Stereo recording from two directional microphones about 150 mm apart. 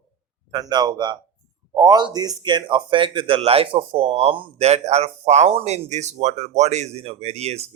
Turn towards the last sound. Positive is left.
turn(degrees=-45)  # may be behind; listen again after turning